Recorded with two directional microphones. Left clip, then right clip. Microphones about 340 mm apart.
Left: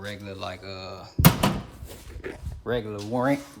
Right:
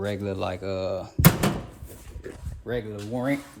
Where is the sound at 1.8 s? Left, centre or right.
Centre.